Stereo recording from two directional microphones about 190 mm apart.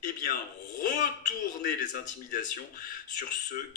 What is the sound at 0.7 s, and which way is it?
Speech, 40° left (ahead or behind).